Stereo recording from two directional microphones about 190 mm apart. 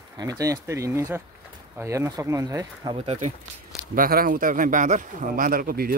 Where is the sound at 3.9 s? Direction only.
50° right (ahead or behind).